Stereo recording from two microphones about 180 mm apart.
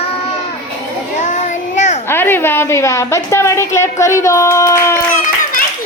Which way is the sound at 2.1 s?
10° left (ahead or behind).